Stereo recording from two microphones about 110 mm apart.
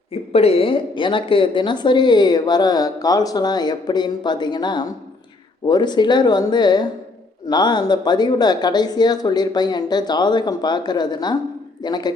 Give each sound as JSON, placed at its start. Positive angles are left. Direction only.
{"t": 0.1, "sound": "a woman's voice", "side_deg": 65}